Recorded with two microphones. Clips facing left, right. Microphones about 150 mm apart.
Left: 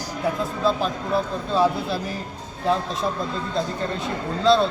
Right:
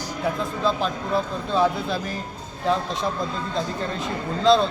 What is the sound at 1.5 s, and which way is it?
Speech, 5° left (ahead or behind).